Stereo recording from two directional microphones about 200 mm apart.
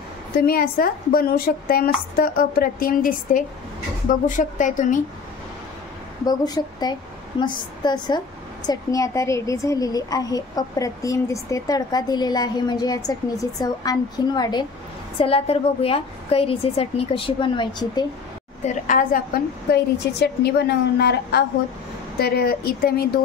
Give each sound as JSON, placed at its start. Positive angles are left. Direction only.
{"t": 0.5, "sound": "a woman's voice", "side_deg": 50}
{"t": 6.2, "sound": "a woman's voice", "side_deg": 20}
{"t": 19.7, "sound": "a woman's voice", "side_deg": 55}